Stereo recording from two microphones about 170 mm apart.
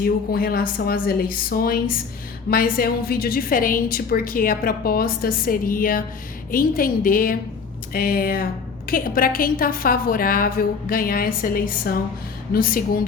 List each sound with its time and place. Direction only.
0.0 s a woman's voice: 60° left (ahead or behind)